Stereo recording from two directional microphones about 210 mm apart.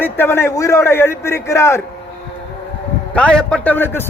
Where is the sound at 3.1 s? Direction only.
5° left (ahead or behind).